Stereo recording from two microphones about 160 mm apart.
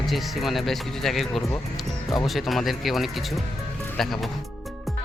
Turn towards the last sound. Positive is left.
turn(degrees=0)  # may be behind; listen again after turning